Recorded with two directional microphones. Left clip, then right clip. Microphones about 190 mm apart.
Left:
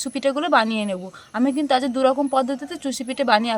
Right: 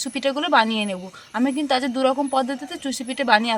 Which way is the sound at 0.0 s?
10° left (ahead or behind).